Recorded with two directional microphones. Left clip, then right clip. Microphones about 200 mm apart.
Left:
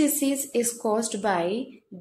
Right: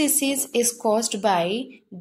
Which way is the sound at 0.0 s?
25° right (ahead or behind).